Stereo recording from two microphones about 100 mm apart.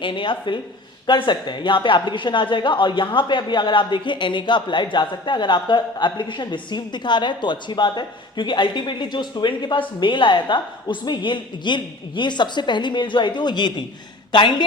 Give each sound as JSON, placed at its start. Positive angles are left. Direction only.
{"t": 0.0, "sound": "speech", "side_deg": 55}